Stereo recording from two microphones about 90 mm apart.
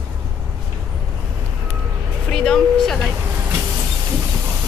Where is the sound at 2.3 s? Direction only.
5° left (ahead or behind).